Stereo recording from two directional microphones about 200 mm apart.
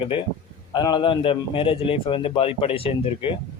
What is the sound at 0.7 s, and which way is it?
A man's voice, 20° left (ahead or behind).